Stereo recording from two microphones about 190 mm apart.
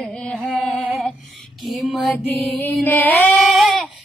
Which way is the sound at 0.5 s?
Centre (ahead or behind).